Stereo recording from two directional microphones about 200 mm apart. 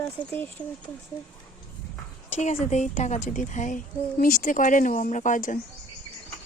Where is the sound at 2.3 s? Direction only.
35° left (ahead or behind).